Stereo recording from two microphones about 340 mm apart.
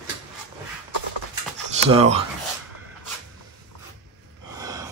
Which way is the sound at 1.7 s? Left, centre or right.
Centre.